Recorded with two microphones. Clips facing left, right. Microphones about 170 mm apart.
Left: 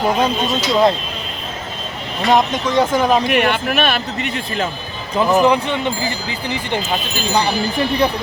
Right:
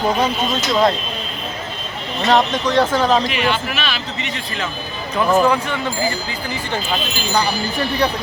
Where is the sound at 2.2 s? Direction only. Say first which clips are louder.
Left 1 dB; 15° left (ahead or behind).